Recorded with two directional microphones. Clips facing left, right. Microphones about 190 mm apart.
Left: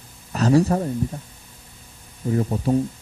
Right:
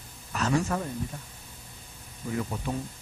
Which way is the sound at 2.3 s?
35° left (ahead or behind).